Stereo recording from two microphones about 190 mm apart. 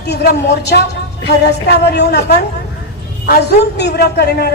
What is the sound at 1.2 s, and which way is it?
A man's voice, 60° left (ahead or behind).